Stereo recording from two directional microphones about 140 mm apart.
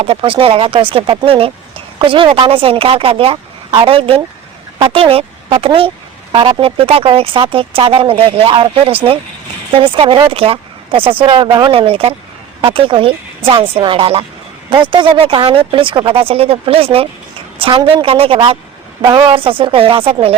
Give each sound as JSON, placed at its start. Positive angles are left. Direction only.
{"t": 0.0, "sound": "speech", "side_deg": -40}